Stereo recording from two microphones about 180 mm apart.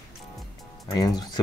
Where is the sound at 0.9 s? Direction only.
20° left (ahead or behind).